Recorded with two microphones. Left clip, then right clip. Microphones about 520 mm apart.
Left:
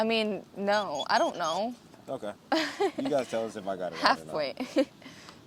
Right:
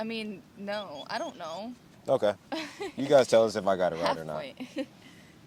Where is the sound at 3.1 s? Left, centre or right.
Right.